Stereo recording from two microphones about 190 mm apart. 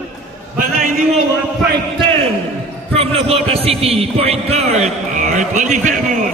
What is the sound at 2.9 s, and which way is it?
A man's voice, 30° right (ahead or behind).